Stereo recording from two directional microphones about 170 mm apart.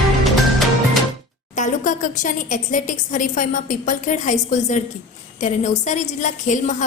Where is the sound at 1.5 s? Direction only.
50° left (ahead or behind).